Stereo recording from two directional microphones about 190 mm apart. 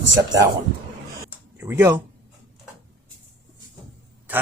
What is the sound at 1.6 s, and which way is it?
Speech, 10° right (ahead or behind).